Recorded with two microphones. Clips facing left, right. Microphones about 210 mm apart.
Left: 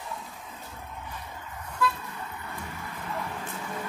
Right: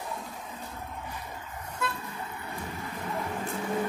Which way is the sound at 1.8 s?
25° right (ahead or behind).